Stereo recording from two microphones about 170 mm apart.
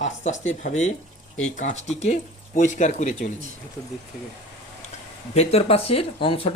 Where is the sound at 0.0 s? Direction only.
45° left (ahead or behind).